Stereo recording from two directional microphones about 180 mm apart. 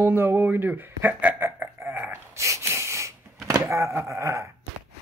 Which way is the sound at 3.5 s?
15° right (ahead or behind).